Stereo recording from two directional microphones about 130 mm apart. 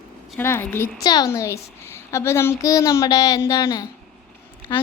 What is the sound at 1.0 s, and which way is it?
A woman's voice, 30° left (ahead or behind).